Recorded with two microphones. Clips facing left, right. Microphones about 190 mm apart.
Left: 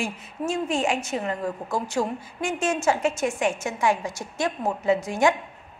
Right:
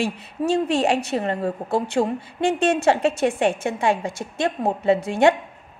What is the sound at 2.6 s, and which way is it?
Speech, 65° right (ahead or behind).